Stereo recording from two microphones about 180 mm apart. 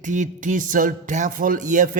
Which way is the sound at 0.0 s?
45° right (ahead or behind).